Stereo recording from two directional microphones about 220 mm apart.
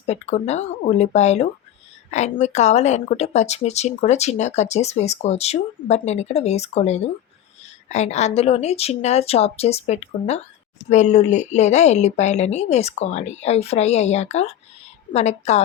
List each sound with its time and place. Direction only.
0.0 s a woman's voice: 30° left (ahead or behind)